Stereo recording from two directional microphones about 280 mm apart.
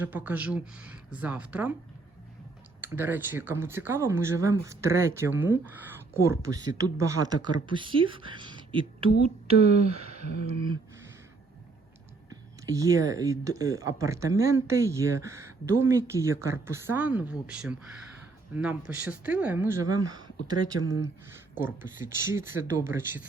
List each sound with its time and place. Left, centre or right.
0.0 s speech: centre
2.8 s speech: centre
10.0 s a sound: right
12.3 s speech: centre